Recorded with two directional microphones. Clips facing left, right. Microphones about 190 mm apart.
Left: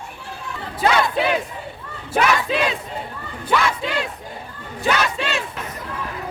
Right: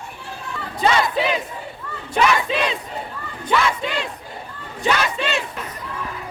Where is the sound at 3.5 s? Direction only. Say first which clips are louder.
Even; centre (ahead or behind).